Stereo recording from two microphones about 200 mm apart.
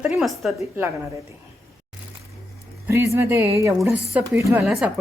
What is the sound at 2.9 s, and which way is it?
A woman's voice, 15° right (ahead or behind).